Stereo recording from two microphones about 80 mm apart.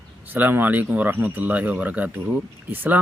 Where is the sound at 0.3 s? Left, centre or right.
Right.